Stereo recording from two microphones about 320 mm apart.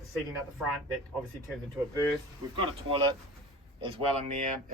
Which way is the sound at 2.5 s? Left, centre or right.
Centre.